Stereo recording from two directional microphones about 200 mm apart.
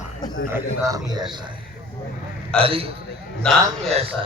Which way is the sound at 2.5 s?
30° right (ahead or behind).